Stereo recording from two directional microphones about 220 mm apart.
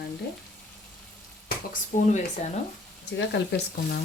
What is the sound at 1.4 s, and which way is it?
Speech, 35° left (ahead or behind).